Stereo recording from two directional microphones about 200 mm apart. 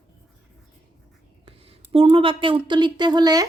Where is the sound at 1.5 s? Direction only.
30° right (ahead or behind).